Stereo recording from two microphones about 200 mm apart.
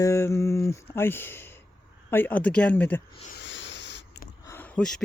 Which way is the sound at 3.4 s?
65° left (ahead or behind).